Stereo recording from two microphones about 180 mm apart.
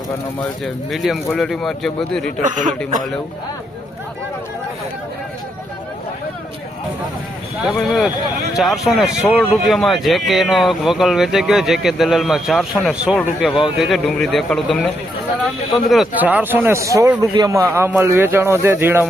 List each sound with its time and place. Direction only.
0.6 s speech: centre (ahead or behind)
2.4 s speech: 45° right (ahead or behind)
7.8 s speech: centre (ahead or behind)
15.9 s a man's voice: 5° right (ahead or behind)